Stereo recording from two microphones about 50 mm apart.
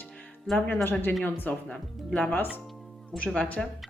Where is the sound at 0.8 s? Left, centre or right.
Left.